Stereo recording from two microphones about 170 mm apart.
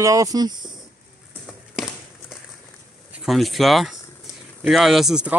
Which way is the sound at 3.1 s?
Centre (ahead or behind).